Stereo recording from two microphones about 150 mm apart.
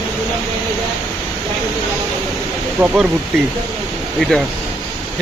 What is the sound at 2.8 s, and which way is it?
Speech, 15° right (ahead or behind).